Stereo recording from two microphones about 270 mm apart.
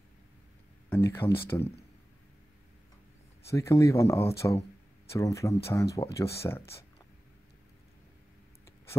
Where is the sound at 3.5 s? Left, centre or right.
Centre.